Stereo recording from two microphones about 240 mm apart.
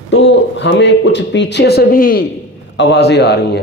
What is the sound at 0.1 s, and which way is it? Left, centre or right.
A man's voice, left.